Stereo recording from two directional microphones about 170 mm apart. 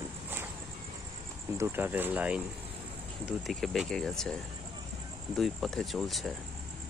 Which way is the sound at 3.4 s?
Centre (ahead or behind).